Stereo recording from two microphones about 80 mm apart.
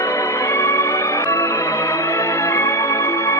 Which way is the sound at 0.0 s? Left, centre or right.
Left.